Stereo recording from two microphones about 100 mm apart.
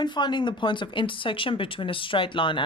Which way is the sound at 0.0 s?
50° left (ahead or behind).